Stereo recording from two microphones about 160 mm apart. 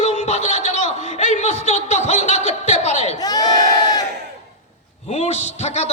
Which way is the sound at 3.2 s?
25° left (ahead or behind).